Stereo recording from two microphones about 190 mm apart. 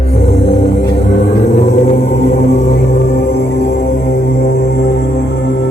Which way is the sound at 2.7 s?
65° left (ahead or behind).